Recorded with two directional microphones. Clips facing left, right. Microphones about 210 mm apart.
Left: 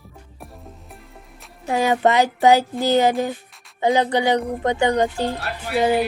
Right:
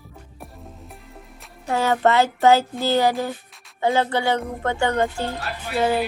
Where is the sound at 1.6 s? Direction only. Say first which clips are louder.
Left 1 dB; 15° left (ahead or behind).